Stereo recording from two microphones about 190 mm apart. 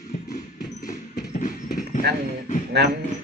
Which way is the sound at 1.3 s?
45° left (ahead or behind).